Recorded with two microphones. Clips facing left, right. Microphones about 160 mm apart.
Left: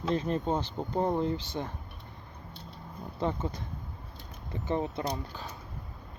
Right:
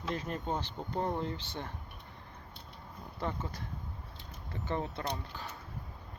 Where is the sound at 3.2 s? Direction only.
20° left (ahead or behind).